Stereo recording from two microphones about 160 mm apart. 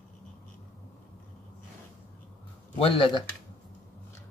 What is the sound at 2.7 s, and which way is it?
Speech, 35° left (ahead or behind).